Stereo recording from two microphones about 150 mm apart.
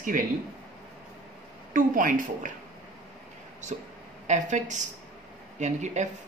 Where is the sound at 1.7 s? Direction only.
65° right (ahead or behind).